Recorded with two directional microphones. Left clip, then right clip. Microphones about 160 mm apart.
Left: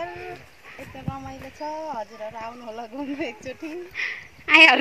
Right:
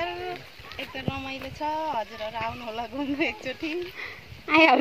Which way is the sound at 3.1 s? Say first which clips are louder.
Right 5 dB; 70° left (ahead or behind).